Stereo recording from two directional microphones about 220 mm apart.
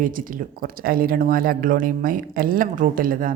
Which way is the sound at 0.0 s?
40° right (ahead or behind).